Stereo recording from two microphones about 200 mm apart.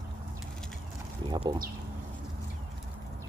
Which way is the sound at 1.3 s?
20° right (ahead or behind).